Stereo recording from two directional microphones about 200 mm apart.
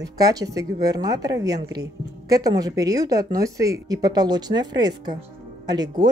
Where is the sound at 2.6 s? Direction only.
20° right (ahead or behind).